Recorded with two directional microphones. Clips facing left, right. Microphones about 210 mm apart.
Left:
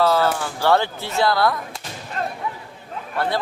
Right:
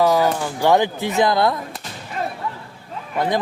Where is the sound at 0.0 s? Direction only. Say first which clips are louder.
Right 2 dB; 15° right (ahead or behind).